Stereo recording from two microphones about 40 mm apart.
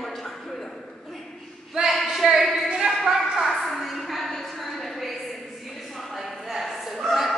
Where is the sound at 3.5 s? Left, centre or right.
Centre.